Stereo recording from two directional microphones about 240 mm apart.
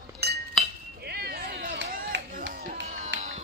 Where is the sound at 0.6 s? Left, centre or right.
Centre.